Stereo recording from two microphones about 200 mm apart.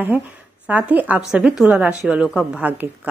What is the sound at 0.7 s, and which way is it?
A woman's voice, 5° right (ahead or behind).